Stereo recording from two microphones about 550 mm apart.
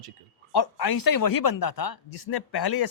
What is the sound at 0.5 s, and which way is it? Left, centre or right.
Speech, left.